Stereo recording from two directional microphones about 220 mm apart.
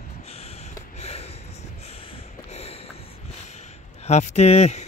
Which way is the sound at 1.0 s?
30° left (ahead or behind).